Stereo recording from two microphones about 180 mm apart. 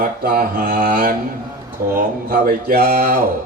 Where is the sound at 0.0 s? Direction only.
55° right (ahead or behind).